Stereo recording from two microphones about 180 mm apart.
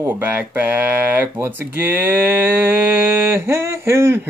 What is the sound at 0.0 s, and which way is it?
Speech, 10° right (ahead or behind).